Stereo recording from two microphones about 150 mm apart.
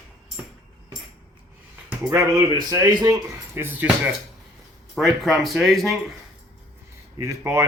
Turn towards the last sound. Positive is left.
turn(degrees=-20)  # may be behind; listen again after turning